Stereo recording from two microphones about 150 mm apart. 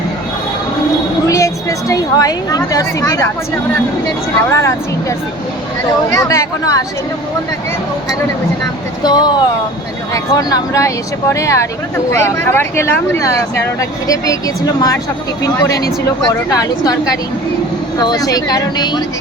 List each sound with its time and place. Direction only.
1.9 s speech: 25° left (ahead or behind)
4.5 s speech: 20° left (ahead or behind)
9.0 s speech: 25° left (ahead or behind)